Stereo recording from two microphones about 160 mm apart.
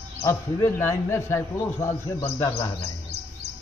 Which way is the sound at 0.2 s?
15° left (ahead or behind).